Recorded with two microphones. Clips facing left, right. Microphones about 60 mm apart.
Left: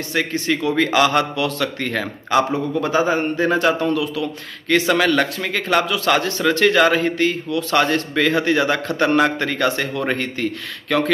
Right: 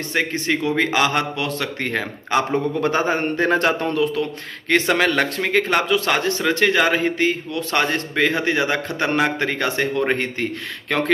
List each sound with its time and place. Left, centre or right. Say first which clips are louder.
0.1 s a man's voice: left 1 dB; right
2.8 s a man's voice: left 4 dB; right